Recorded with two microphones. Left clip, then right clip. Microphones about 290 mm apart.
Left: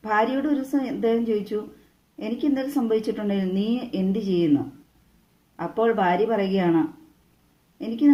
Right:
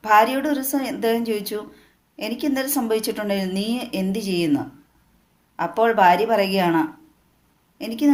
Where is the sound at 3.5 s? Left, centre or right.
Right.